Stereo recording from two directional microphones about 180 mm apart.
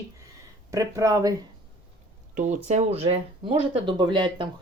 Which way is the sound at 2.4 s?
45° right (ahead or behind).